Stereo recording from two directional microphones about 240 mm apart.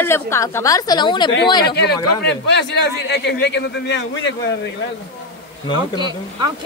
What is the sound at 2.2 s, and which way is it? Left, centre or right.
A man's voice, left.